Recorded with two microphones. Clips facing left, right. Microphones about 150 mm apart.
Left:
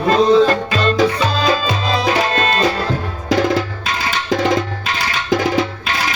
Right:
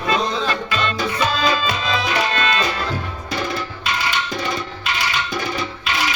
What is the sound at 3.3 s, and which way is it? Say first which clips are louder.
Music: left 10 dB; 90° left.